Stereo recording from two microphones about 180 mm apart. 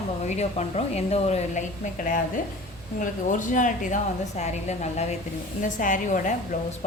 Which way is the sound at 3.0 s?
45° left (ahead or behind).